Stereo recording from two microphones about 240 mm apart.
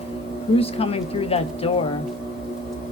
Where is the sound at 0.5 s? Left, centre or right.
Left.